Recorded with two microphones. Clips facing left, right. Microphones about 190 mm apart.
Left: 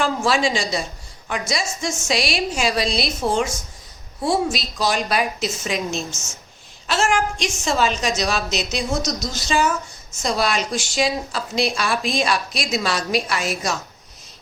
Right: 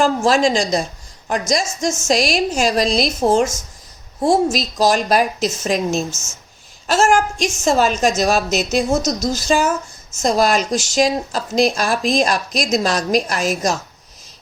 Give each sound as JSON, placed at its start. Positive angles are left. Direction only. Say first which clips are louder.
{"t": 0.0, "sound": "a woman's voice", "louder": "right 5 dB", "side_deg": -40}